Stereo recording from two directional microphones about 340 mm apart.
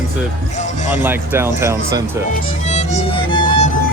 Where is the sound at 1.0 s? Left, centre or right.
Centre.